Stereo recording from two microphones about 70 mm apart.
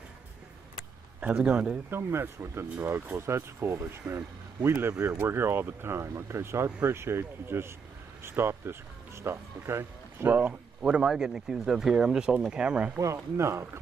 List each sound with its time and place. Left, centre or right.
1.9 s speech: right
10.4 s speech: centre
13.0 s speech: right